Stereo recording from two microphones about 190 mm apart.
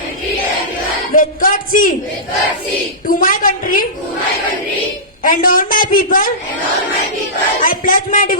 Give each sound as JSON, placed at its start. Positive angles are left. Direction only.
{"t": 1.1, "sound": "a woman's voice", "side_deg": 45}
{"t": 3.1, "sound": "a woman's voice", "side_deg": 45}
{"t": 5.2, "sound": "a woman's voice", "side_deg": 45}
{"t": 7.6, "sound": "a woman's voice", "side_deg": 45}